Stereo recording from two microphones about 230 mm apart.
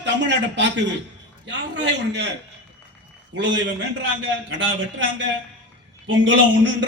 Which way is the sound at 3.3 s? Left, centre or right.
Right.